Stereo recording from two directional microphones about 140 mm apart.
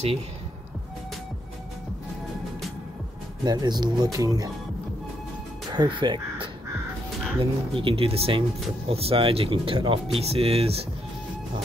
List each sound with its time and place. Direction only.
3.4 s speech: 30° right (ahead or behind)
5.8 s speech: 35° right (ahead or behind)